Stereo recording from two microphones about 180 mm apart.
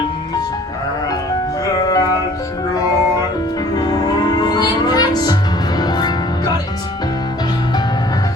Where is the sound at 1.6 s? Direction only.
20° left (ahead or behind).